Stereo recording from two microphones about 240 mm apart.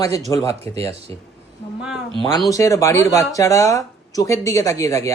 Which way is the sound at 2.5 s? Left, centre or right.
Centre.